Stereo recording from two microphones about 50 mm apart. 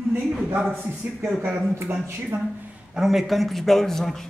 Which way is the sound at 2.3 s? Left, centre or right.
Right.